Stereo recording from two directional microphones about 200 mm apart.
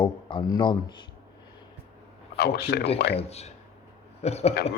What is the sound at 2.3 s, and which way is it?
Speech, 55° left (ahead or behind).